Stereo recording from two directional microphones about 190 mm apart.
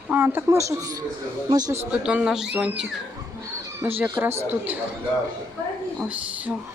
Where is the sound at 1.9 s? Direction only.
5° right (ahead or behind).